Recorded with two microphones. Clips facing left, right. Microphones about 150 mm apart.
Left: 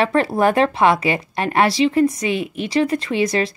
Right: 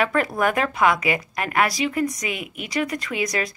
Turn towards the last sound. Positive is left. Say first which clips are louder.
# left 6 dB
turn(degrees=30)  # may be behind; listen again after turning